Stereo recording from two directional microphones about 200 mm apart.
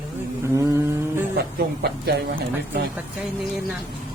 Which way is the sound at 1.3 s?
55° right (ahead or behind).